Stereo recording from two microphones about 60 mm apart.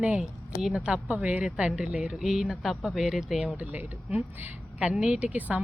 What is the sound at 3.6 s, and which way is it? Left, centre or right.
Speech, right.